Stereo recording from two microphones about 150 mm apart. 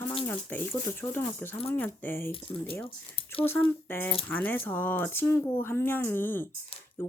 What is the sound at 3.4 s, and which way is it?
Speech, 15° left (ahead or behind).